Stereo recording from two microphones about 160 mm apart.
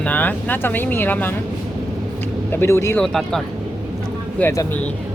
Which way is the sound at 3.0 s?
Centre (ahead or behind).